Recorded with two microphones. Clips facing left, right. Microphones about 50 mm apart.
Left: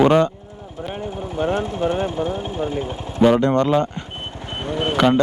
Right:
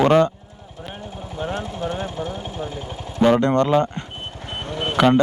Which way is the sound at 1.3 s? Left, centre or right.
Left.